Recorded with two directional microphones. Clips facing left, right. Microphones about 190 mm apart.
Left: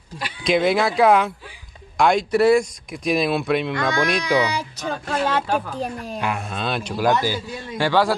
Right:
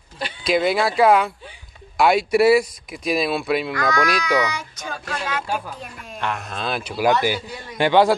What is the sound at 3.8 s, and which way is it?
Speech, 30° left (ahead or behind).